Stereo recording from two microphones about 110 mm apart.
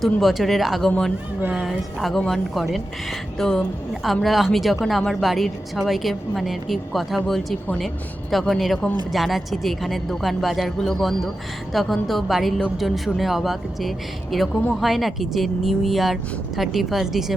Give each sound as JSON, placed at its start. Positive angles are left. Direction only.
{"t": 0.0, "sound": "a woman's voice", "side_deg": 0}
{"t": 8.3, "sound": "a woman's voice", "side_deg": 0}